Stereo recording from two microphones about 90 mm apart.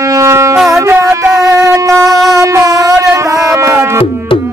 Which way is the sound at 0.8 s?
30° right (ahead or behind).